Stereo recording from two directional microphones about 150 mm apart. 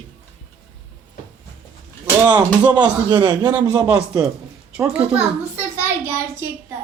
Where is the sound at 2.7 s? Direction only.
30° right (ahead or behind).